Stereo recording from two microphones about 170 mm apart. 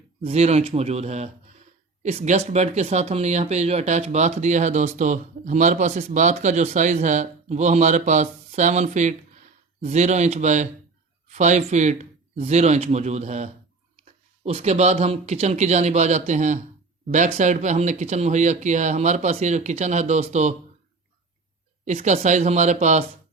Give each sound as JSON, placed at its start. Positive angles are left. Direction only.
{"t": 0.2, "sound": "speech", "side_deg": -35}
{"t": 21.8, "sound": "speech", "side_deg": -45}